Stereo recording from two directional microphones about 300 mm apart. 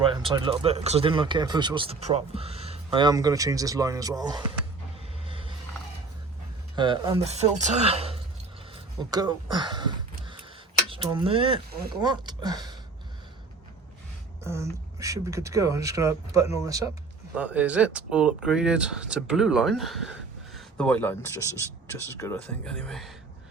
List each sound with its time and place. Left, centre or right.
0.0 s speech: centre
5.3 s vehicle: centre
6.7 s speech: centre
8.7 s a sound: centre
11.1 s speech: centre
14.4 s speech: centre